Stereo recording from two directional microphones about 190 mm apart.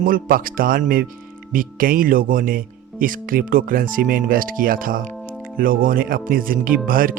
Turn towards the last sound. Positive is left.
turn(degrees=-50)  # may be behind; listen again after turning